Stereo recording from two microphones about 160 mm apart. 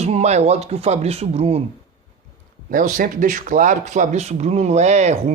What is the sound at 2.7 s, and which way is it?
A man's voice, 55° right (ahead or behind).